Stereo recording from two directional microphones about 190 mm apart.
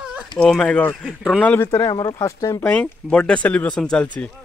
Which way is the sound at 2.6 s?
5° left (ahead or behind).